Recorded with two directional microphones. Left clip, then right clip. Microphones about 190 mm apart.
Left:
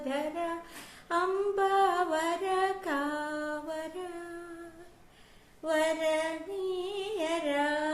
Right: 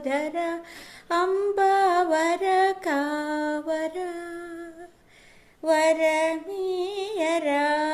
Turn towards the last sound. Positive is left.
turn(degrees=-40)  # may be behind; listen again after turning